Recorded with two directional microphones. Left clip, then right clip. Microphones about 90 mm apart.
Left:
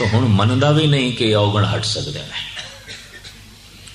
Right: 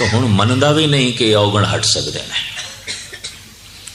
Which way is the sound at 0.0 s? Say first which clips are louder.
Right 3 dB; 25° right (ahead or behind).